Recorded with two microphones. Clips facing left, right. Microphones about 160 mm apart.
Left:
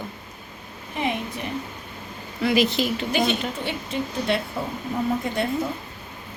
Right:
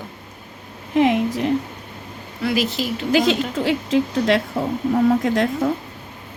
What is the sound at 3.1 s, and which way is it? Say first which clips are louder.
A woman's voice: right 8 dB; 90° right.